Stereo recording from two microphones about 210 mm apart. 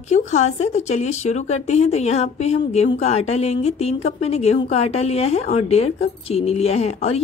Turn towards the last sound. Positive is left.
turn(degrees=30)  # may be behind; listen again after turning